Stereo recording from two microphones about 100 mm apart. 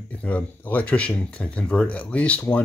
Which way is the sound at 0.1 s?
15° left (ahead or behind).